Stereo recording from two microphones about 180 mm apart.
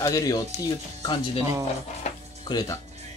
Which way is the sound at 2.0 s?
40° left (ahead or behind).